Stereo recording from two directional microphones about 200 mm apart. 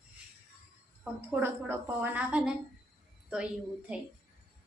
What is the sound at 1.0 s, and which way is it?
A woman's voice, 10° right (ahead or behind).